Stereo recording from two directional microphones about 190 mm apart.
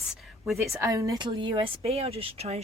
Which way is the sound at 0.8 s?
15° right (ahead or behind).